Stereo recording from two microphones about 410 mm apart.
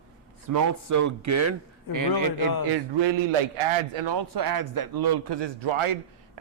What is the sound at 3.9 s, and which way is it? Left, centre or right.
A man's voice, right.